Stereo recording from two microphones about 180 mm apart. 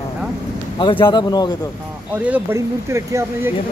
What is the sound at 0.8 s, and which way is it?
Speech, 25° left (ahead or behind).